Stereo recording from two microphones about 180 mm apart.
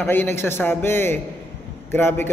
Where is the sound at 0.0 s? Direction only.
10° left (ahead or behind).